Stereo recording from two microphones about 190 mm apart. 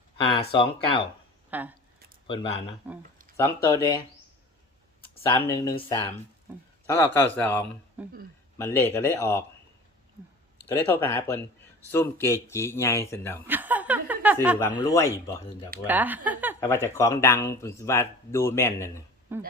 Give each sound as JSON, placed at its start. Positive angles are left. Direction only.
{"t": 0.3, "sound": "speech", "side_deg": 30}
{"t": 1.5, "sound": "speech", "side_deg": -10}
{"t": 2.2, "sound": "speech", "side_deg": 25}
{"t": 3.3, "sound": "speech", "side_deg": 15}
{"t": 5.2, "sound": "speech", "side_deg": 15}
{"t": 6.8, "sound": "speech", "side_deg": 10}
{"t": 8.0, "sound": "a man's voice", "side_deg": -10}
{"t": 8.5, "sound": "speech", "side_deg": 15}
{"t": 10.7, "sound": "speech", "side_deg": 10}
{"t": 13.5, "sound": "a sound", "side_deg": -10}
{"t": 14.8, "sound": "speech", "side_deg": 15}
{"t": 15.9, "sound": "speech", "side_deg": -10}
{"t": 16.6, "sound": "speech", "side_deg": 15}
{"t": 19.3, "sound": "speech", "side_deg": -10}